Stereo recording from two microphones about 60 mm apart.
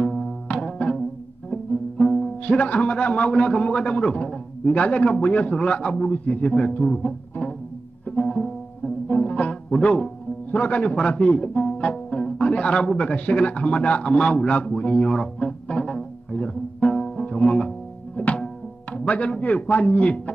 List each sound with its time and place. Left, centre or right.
0.0 s music: centre
2.4 s a man's voice: left
6.9 s music: left
9.7 s a man's voice: centre
15.4 s music: centre
18.1 s music: left
18.9 s a man's voice: left